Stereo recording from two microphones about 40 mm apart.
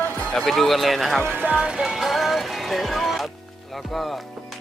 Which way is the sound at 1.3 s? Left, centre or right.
Right.